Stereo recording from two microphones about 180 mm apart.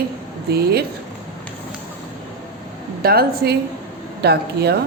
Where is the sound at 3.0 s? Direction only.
55° right (ahead or behind).